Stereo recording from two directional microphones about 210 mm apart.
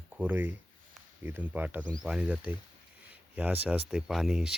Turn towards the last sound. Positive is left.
turn(degrees=-5)  # may be behind; listen again after turning